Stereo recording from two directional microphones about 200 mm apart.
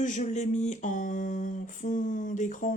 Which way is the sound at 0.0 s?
35° left (ahead or behind).